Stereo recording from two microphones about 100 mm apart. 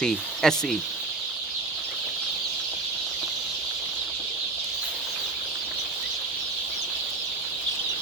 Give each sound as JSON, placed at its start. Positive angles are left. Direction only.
{"t": 0.0, "sound": "speech", "side_deg": 5}